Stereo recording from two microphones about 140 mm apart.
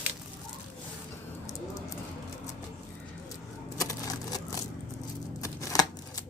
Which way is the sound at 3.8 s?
25° left (ahead or behind).